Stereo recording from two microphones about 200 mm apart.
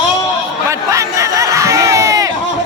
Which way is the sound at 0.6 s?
15° right (ahead or behind).